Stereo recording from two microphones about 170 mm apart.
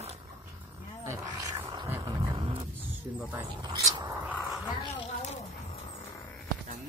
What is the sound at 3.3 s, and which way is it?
Speech, 20° right (ahead or behind).